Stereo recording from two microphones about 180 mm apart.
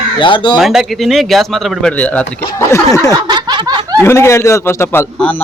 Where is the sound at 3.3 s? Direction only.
25° right (ahead or behind).